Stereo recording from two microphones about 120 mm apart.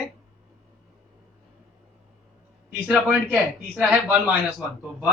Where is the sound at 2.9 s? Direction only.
5° right (ahead or behind).